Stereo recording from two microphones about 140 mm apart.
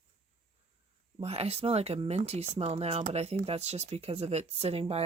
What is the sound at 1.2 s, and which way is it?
Speech, 45° right (ahead or behind).